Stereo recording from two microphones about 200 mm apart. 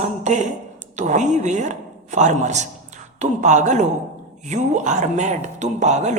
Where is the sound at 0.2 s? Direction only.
35° right (ahead or behind).